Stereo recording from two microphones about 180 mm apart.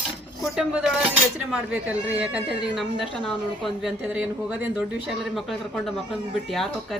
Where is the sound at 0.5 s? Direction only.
5° right (ahead or behind).